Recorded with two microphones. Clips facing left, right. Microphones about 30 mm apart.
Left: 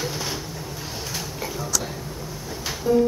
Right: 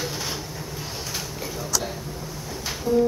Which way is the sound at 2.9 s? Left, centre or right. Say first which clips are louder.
Left 2 dB; left.